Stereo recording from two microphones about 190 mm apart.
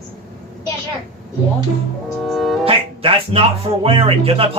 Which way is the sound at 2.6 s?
30° right (ahead or behind).